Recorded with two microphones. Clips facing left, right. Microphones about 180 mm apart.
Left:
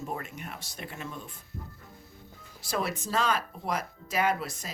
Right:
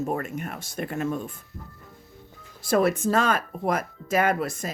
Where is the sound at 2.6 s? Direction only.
50° right (ahead or behind).